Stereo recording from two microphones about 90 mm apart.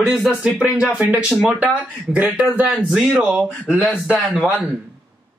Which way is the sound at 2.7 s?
5° right (ahead or behind).